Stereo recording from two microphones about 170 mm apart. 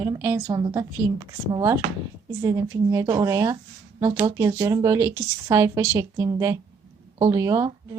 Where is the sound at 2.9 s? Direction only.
20° right (ahead or behind).